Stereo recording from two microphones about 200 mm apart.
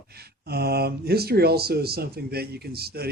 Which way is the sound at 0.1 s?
50° right (ahead or behind).